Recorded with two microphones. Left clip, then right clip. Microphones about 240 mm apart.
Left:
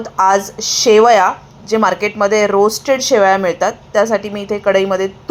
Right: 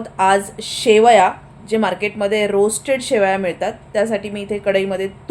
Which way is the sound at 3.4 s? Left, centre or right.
Left.